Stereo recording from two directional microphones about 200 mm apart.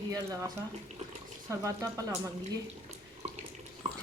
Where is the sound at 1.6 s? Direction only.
15° right (ahead or behind).